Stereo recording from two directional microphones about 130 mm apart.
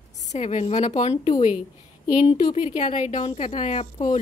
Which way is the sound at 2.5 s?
65° left (ahead or behind).